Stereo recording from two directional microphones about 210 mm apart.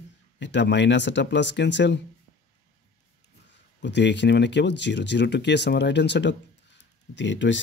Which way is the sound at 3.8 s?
55° left (ahead or behind).